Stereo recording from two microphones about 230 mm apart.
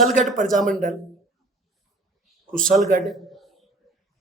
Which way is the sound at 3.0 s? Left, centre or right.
Centre.